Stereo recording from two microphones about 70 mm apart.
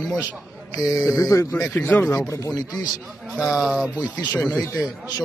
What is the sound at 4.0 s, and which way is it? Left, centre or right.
Speech, left.